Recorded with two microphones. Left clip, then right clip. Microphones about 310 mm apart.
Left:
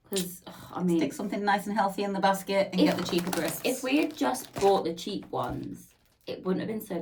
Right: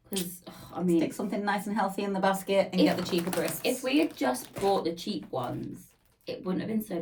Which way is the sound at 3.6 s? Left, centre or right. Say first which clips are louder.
Even; centre.